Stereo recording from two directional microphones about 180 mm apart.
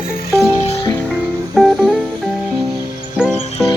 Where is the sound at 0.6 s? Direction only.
25° left (ahead or behind).